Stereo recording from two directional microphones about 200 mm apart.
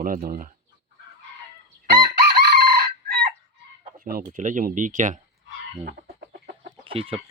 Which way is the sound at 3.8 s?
45° right (ahead or behind).